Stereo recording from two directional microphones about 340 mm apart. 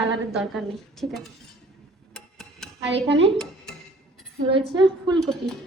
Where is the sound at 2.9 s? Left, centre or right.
Right.